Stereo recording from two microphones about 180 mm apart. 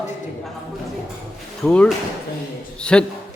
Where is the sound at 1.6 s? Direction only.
5° left (ahead or behind).